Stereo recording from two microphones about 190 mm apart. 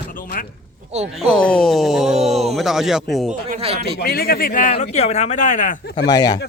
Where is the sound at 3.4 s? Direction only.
30° right (ahead or behind).